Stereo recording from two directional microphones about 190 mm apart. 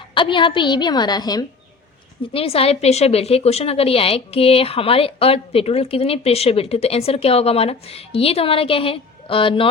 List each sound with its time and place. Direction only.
0.1 s a woman's voice: 25° left (ahead or behind)